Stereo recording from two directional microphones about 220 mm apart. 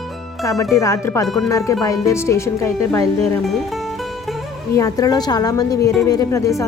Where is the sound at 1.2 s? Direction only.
Centre (ahead or behind).